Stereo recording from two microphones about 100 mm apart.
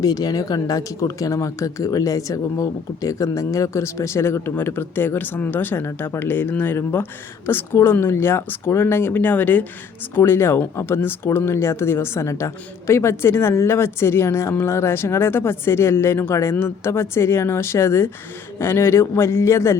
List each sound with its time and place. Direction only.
0.0 s speech: 40° left (ahead or behind)